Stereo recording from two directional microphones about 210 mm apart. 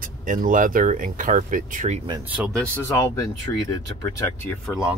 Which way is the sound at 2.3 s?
Centre (ahead or behind).